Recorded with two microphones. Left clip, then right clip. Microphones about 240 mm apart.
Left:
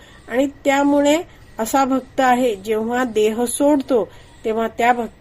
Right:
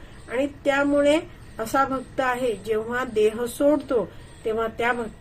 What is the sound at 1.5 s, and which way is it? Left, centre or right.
A woman's voice, left.